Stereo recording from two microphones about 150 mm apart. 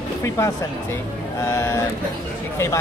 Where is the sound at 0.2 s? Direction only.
20° left (ahead or behind).